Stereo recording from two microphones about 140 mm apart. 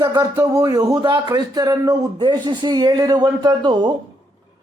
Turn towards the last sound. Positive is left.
turn(degrees=-30)  # may be behind; listen again after turning